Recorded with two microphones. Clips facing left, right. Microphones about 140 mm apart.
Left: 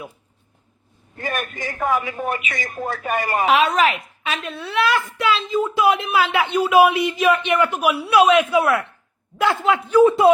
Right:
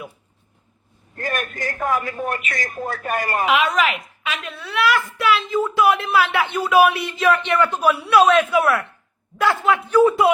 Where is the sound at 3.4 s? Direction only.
35° left (ahead or behind).